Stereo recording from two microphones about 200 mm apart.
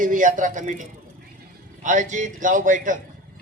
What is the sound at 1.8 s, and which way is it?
A man's voice, 40° right (ahead or behind).